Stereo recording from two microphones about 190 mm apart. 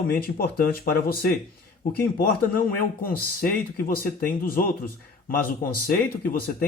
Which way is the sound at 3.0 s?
50° left (ahead or behind).